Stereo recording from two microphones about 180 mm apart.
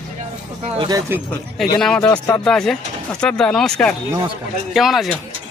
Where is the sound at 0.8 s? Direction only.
20° right (ahead or behind).